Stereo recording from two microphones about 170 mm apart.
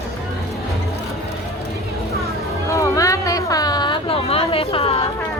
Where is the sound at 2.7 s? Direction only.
20° left (ahead or behind); by 5.1 s 35° left (ahead or behind).